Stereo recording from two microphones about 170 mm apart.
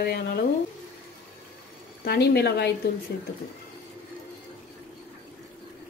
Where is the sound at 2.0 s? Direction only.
70° left (ahead or behind).